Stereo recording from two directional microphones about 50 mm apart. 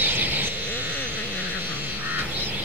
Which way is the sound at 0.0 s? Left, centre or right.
Right.